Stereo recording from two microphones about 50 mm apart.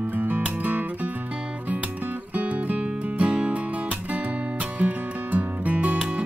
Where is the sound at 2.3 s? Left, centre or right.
Right.